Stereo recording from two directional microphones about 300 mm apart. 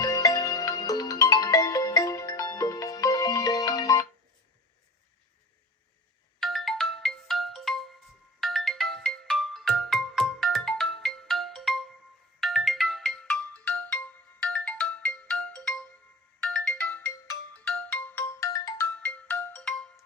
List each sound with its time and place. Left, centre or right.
0.0 s music: centre
6.4 s ringtone: centre